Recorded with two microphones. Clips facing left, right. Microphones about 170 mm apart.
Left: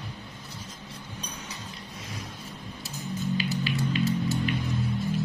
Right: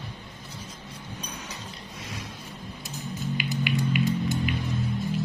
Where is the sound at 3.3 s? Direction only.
15° right (ahead or behind).